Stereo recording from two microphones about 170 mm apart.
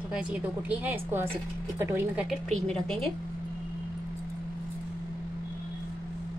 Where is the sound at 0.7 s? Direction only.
10° right (ahead or behind).